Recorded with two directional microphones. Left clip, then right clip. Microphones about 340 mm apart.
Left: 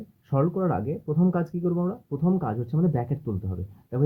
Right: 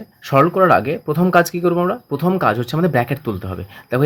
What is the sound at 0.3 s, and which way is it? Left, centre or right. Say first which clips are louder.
Speech: right 14 dB; right.